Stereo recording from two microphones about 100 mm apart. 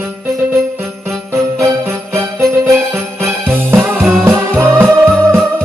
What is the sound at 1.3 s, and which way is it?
Jingle bell, 25° right (ahead or behind).